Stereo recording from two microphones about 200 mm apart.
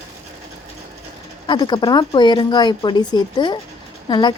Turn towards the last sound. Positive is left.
turn(degrees=20)  # may be behind; listen again after turning